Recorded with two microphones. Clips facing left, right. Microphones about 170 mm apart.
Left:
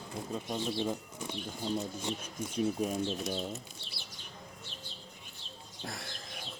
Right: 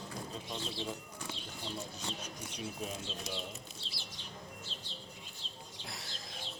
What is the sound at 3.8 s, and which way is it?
Bird, 60° left (ahead or behind).